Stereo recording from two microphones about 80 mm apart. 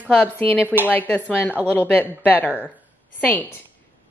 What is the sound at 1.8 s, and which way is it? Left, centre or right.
Speech, left.